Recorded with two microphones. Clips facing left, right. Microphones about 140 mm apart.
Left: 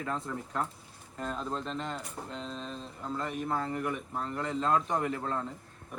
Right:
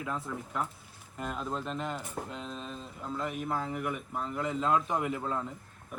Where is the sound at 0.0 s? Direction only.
5° right (ahead or behind).